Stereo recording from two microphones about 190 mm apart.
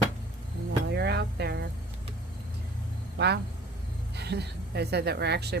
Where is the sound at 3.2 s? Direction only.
60° right (ahead or behind).